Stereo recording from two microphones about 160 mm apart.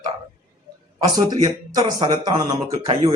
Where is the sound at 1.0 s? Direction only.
25° right (ahead or behind).